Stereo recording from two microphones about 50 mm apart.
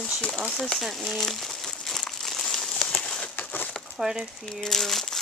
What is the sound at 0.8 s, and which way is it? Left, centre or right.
Crumpling, centre.